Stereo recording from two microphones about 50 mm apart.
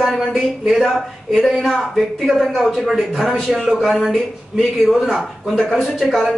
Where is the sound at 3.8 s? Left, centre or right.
Centre.